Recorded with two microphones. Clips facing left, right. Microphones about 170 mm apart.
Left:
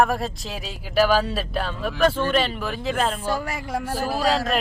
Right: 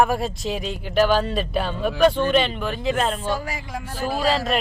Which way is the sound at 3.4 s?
60° left (ahead or behind).